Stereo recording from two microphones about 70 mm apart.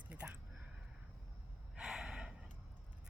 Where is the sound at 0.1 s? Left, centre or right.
Centre.